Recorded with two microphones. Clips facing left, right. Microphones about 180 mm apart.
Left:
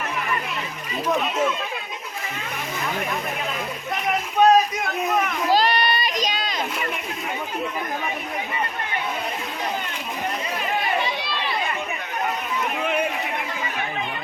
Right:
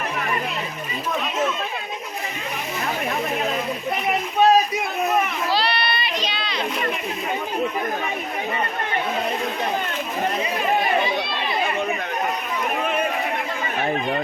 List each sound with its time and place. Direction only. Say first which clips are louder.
4.4 s a sound: left 1 dB; 5° right (ahead or behind)
5.5 s child singing: left 3 dB; 45° left (ahead or behind)
13.8 s chatter: right 7 dB; 45° right (ahead or behind)